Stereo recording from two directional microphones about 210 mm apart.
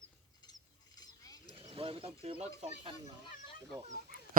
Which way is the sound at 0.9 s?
20° left (ahead or behind).